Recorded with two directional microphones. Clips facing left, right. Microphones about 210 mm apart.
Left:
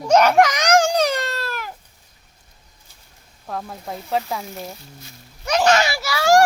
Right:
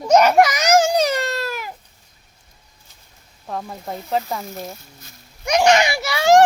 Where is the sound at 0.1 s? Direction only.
10° right (ahead or behind).